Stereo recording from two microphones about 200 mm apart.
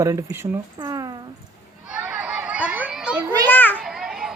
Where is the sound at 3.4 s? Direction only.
10° left (ahead or behind).